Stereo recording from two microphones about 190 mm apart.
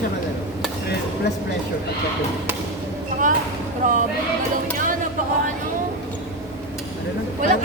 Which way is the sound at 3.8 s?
45° right (ahead or behind).